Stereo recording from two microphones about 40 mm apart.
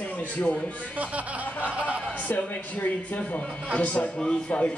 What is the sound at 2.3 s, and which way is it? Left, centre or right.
A man's voice, left.